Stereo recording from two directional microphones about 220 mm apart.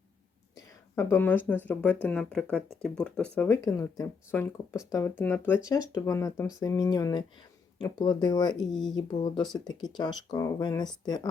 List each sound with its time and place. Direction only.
0.5 s speech: 15° left (ahead or behind)
8.7 s speech: centre (ahead or behind)
9.0 s speech: 20° left (ahead or behind)